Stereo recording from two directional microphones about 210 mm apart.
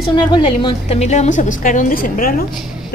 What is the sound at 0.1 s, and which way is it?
A woman's voice, 20° left (ahead or behind).